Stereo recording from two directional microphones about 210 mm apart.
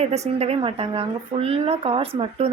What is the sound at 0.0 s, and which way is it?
A woman's voice, 30° right (ahead or behind).